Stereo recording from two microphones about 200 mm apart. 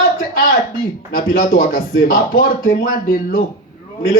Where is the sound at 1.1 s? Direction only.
45° left (ahead or behind).